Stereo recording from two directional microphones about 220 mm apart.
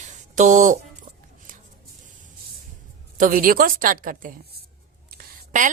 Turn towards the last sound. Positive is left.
turn(degrees=-35)  # may be behind; listen again after turning